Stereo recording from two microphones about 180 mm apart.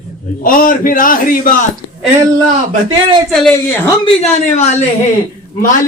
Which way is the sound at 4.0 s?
35° left (ahead or behind).